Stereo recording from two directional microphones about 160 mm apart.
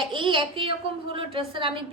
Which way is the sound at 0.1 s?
30° right (ahead or behind).